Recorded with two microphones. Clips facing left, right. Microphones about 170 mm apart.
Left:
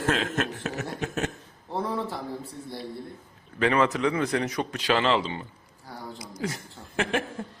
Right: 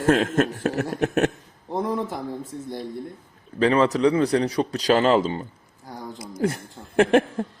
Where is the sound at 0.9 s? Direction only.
65° right (ahead or behind).